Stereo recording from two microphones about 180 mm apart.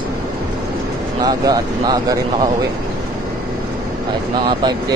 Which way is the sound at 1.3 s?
20° right (ahead or behind).